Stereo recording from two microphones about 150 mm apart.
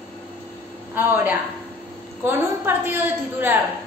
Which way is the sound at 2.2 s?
15° right (ahead or behind).